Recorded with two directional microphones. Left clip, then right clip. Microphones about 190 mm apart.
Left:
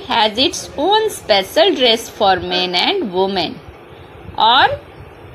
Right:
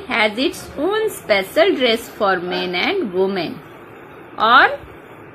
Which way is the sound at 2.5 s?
20° right (ahead or behind).